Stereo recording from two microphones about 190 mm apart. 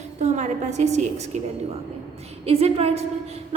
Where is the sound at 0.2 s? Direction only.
40° right (ahead or behind).